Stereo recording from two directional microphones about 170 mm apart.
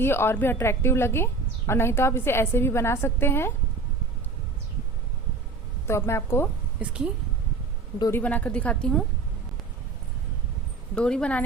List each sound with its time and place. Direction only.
0.0 s a woman's voice: 15° left (ahead or behind)
5.9 s a woman's voice: 15° left (ahead or behind)
7.9 s a woman's voice: 20° left (ahead or behind)
8.2 s a woman's voice: 10° left (ahead or behind)
10.9 s a woman's voice: 5° left (ahead or behind)